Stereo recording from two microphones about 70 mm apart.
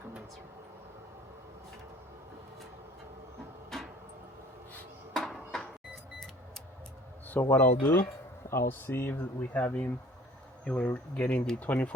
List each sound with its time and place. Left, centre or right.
5.1 s a sound: centre
7.3 s speech: left
8.4 s speech: left
10.6 s speech: centre